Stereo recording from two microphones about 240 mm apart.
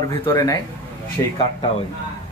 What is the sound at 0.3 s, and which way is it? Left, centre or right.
Speech, centre.